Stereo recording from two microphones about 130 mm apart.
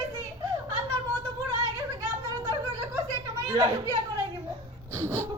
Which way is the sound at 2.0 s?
25° right (ahead or behind).